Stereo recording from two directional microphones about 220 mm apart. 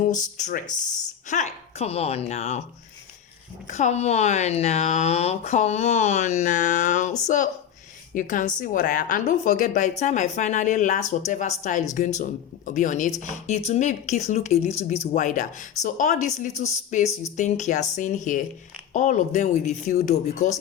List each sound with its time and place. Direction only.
0.3 s speech: 35° left (ahead or behind)
3.7 s speech: 30° left (ahead or behind)